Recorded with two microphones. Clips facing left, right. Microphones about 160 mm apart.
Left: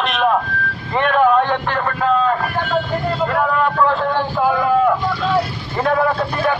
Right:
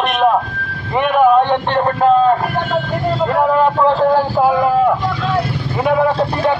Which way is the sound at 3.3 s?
30° right (ahead or behind).